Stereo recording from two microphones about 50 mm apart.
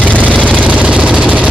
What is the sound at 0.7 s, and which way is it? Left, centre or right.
Engine, right.